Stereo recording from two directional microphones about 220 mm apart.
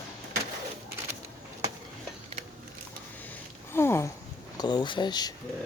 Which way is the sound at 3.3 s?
10° left (ahead or behind).